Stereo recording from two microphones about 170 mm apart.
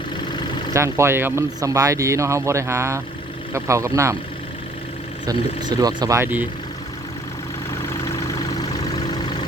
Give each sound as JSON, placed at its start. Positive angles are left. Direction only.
{"t": 0.7, "sound": "speech", "side_deg": -15}
{"t": 5.2, "sound": "speech", "side_deg": -25}